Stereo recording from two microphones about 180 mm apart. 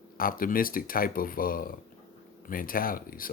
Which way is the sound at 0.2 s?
50° left (ahead or behind).